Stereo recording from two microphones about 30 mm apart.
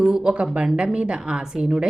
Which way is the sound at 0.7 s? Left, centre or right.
Right.